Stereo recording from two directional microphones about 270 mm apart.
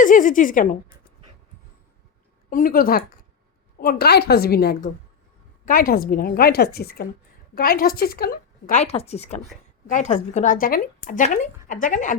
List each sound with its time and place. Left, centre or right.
0.0 s a woman's voice: left
2.5 s a woman's voice: left